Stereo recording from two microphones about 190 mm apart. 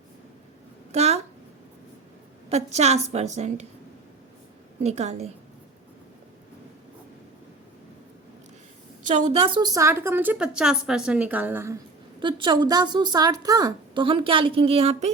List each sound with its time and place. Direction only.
0.9 s a sound: 35° right (ahead or behind)
2.5 s a woman's voice: 35° right (ahead or behind)
4.8 s a woman's voice: 35° right (ahead or behind)
9.0 s a woman's voice: 35° right (ahead or behind); by 11.8 s 15° right (ahead or behind)
12.2 s a woman's voice: 25° right (ahead or behind)